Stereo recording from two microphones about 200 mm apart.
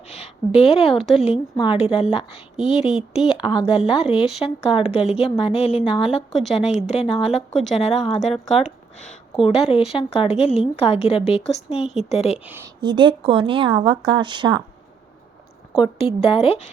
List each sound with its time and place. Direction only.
0.1 s a woman's voice: 30° left (ahead or behind)
9.0 s a sound: 5° left (ahead or behind)
9.4 s a woman's voice: 30° left (ahead or behind)
12.8 s speech: 25° right (ahead or behind)
15.8 s speech: 25° left (ahead or behind)